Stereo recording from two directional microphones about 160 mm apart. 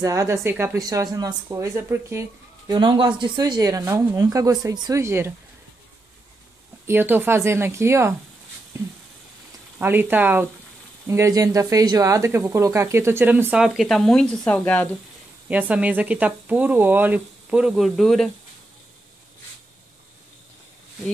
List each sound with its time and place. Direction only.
0.0 s speech: 20° right (ahead or behind)
2.7 s speech: 30° right (ahead or behind)
6.9 s speech: 15° right (ahead or behind)
9.8 s speech: 10° right (ahead or behind); by 14.9 s 10° left (ahead or behind)
15.4 s speech: 10° right (ahead or behind)